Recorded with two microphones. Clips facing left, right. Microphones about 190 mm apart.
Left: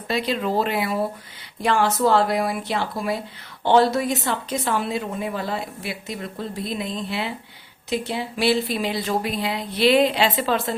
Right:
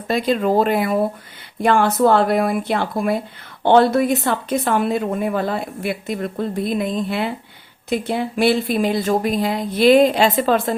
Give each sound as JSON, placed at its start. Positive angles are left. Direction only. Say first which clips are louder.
{"t": 0.1, "sound": "speech", "louder": "right 6 dB", "side_deg": -45}